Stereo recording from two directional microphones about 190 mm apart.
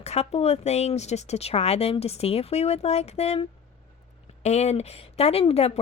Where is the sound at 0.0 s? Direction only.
35° left (ahead or behind).